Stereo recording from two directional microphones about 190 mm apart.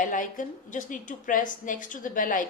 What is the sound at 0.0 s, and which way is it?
A woman's voice, 45° left (ahead or behind).